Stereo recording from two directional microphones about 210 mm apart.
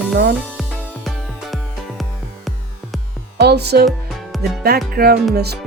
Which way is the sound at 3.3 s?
50° right (ahead or behind).